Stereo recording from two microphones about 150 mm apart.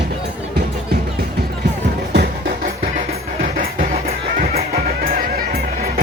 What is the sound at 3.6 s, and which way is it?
Music, 75° right (ahead or behind).